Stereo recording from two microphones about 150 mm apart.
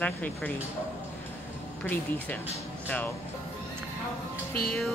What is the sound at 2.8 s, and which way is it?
Speech, 10° left (ahead or behind).